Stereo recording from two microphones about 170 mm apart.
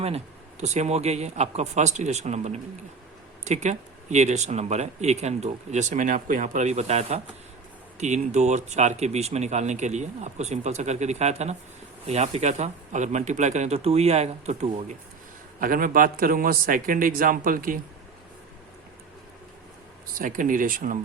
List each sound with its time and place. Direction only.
0.6 s speech: 40° right (ahead or behind)
15.6 s a man's voice: 55° right (ahead or behind)
20.1 s speech: 50° right (ahead or behind)